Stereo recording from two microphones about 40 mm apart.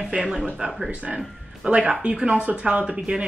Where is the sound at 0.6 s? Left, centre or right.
Right.